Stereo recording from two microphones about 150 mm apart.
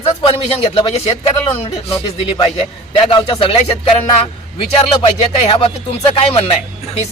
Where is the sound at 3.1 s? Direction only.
35° left (ahead or behind).